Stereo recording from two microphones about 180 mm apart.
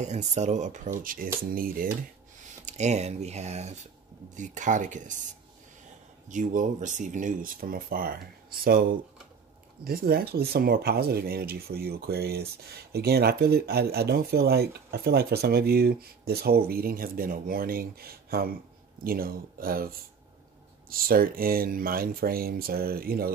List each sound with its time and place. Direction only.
0.0 s speech: 40° right (ahead or behind)
2.4 s speech: 40° right (ahead or behind)
6.2 s speech: 45° right (ahead or behind)
20.9 s speech: 55° right (ahead or behind)